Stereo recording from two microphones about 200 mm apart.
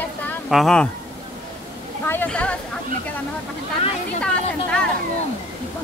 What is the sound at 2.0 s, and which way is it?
Speech, 10° left (ahead or behind).